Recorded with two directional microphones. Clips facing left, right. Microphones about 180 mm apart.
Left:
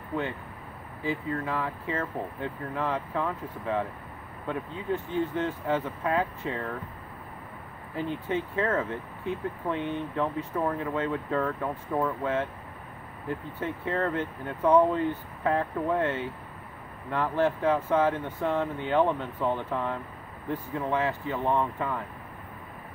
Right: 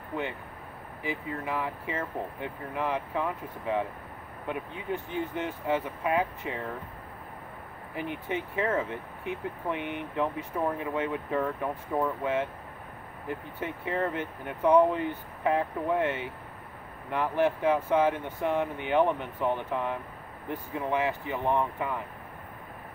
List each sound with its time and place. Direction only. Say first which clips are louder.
1.0 s speech: left 3 dB; 15° right (ahead or behind)
7.9 s speech: left 3 dB; 15° right (ahead or behind)